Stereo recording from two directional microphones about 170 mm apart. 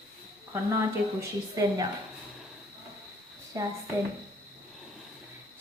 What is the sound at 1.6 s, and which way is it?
Speech, 20° right (ahead or behind).